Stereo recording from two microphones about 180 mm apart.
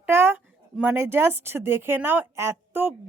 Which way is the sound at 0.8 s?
10° right (ahead or behind).